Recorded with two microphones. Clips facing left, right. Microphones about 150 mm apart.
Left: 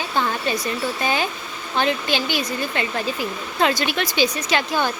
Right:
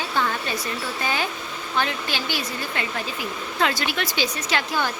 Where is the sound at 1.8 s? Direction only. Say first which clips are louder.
Left 5 dB; 20° left (ahead or behind).